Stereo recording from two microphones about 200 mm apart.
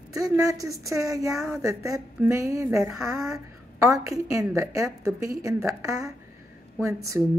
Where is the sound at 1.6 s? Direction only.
15° right (ahead or behind).